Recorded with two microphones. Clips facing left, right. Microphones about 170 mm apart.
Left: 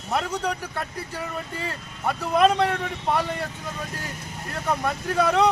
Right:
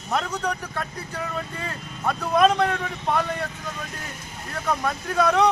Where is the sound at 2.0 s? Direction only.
10° left (ahead or behind).